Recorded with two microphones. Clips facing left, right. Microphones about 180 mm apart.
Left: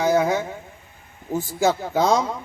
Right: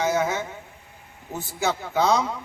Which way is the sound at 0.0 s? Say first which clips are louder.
Left 4 dB; 35° left (ahead or behind).